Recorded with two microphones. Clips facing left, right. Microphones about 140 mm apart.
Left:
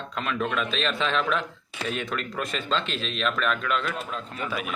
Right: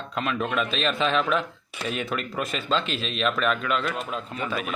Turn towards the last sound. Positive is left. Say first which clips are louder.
# right 2 dB
turn(degrees=5)  # may be behind; listen again after turning